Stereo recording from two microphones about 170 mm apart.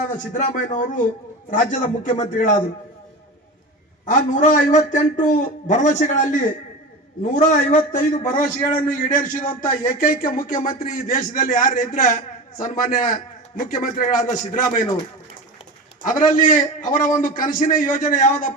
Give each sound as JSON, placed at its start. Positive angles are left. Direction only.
{"t": 0.3, "sound": "a man's voice", "side_deg": 45}
{"t": 2.0, "sound": "a man's voice", "side_deg": 45}
{"t": 4.0, "sound": "a man's voice", "side_deg": 50}
{"t": 16.0, "sound": "a man's voice", "side_deg": 50}